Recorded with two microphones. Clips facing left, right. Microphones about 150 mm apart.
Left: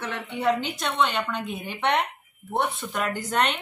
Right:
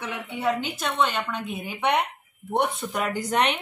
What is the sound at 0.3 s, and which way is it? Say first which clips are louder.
Speech: left 2 dB; 5° right (ahead or behind).